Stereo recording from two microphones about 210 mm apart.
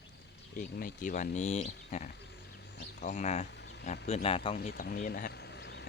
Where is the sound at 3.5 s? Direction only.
55° left (ahead or behind).